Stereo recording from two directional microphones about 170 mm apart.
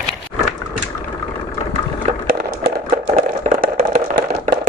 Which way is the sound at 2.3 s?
65° right (ahead or behind).